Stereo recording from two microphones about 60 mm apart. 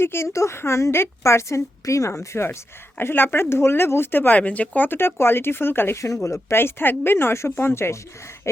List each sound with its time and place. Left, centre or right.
0.0 s a woman's voice: left
4.4 s speech: left
4.9 s a woman's voice: left